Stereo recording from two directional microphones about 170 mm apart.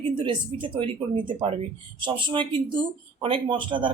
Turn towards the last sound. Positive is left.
turn(degrees=-30)  # may be behind; listen again after turning